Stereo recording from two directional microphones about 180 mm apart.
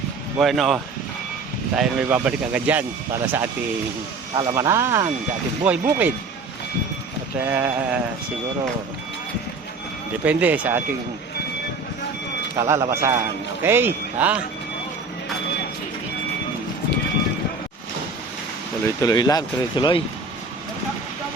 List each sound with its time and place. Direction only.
0.3 s a man's voice: centre (ahead or behind)
4.4 s a man's voice: 20° right (ahead or behind)
7.3 s a man's voice: 10° right (ahead or behind)
10.2 s a man's voice: 10° right (ahead or behind)
12.5 s a man's voice: 15° right (ahead or behind)
19.0 s speech: 20° left (ahead or behind)